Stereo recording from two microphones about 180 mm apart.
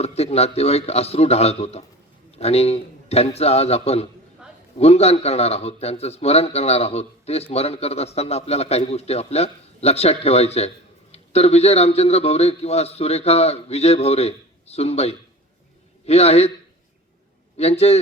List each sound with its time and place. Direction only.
0.0 s a man's voice: 35° left (ahead or behind)
17.6 s a man's voice: 35° left (ahead or behind)